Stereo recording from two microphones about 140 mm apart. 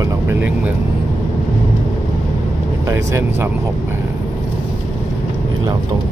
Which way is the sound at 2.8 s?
20° right (ahead or behind).